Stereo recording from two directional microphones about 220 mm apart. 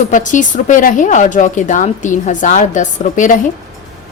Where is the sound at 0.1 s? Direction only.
35° left (ahead or behind).